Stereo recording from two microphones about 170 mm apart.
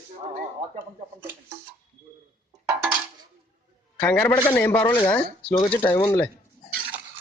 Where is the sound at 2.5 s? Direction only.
20° right (ahead or behind).